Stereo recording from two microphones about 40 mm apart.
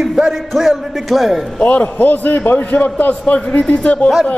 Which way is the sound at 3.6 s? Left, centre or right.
Left.